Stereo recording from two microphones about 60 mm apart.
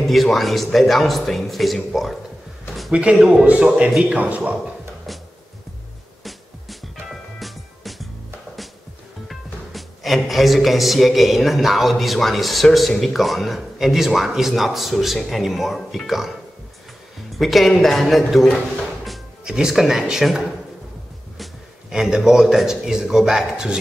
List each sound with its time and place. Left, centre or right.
0.0 s speech: centre
2.9 s speech: centre
6.2 s music: centre
9.3 s speech: centre
17.3 s speech: centre
19.0 s speech: centre
21.9 s a man's voice: centre